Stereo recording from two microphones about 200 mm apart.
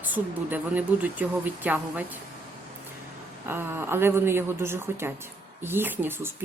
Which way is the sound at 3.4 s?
10° right (ahead or behind).